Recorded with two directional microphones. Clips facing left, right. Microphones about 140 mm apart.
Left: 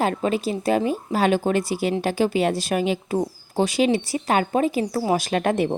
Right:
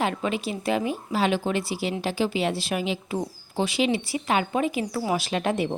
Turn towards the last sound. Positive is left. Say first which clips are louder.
# left 4 dB
turn(degrees=50)  # may be behind; listen again after turning